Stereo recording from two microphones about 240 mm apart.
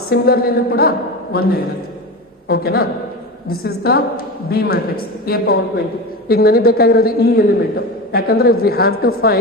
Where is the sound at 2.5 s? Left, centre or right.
Left.